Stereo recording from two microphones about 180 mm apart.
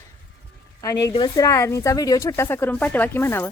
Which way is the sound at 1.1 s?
20° left (ahead or behind).